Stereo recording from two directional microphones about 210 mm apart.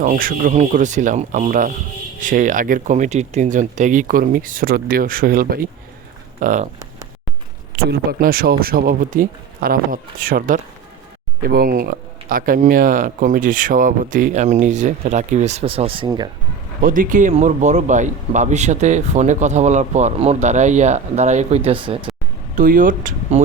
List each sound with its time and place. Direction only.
0.0 s a man's voice: 40° right (ahead or behind)
7.9 s a man's voice: 45° right (ahead or behind); by 16.3 s 20° right (ahead or behind)
16.8 s a man's voice: 40° right (ahead or behind); by 22.1 s 25° right (ahead or behind)
22.5 s a man's voice: 40° right (ahead or behind)